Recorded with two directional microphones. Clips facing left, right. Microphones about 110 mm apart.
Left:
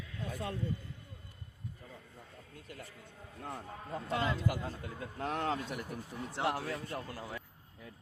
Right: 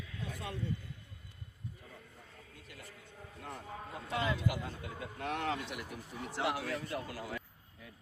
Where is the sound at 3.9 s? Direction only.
45° left (ahead or behind); by 7.4 s 30° left (ahead or behind).